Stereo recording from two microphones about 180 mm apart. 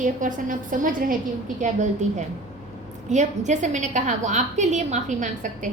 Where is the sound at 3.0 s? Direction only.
40° right (ahead or behind).